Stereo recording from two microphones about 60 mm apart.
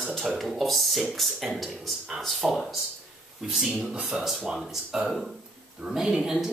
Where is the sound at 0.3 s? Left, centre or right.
Centre.